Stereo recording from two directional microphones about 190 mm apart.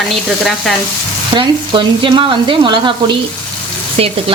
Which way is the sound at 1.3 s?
25° right (ahead or behind).